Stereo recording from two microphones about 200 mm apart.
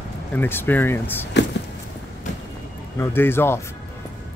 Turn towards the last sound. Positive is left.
turn(degrees=10)  # may be behind; listen again after turning